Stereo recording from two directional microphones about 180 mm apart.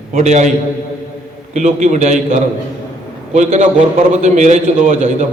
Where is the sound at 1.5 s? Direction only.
40° right (ahead or behind).